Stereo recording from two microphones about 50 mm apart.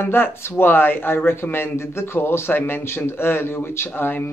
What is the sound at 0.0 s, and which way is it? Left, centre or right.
Speech, left.